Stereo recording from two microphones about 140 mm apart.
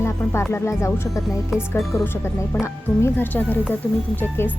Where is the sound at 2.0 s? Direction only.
15° left (ahead or behind).